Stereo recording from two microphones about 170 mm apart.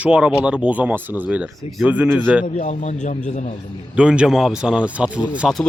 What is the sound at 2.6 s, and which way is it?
Speech, 45° left (ahead or behind).